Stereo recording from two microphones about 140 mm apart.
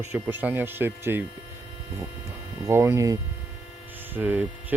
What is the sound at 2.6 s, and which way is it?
Speech, 20° right (ahead or behind).